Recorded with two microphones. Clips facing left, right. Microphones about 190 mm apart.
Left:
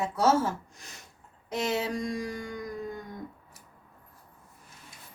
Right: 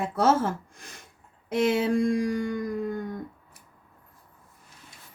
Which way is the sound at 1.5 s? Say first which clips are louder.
Right 7 dB; 55° right (ahead or behind).